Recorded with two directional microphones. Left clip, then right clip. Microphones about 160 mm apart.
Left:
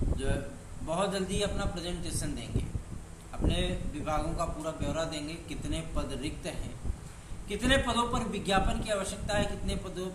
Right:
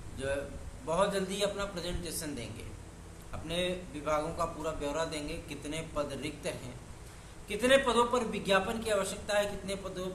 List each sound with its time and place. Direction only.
0.9 s a man's voice: 15° right (ahead or behind)
3.5 s a man's voice: 15° right (ahead or behind)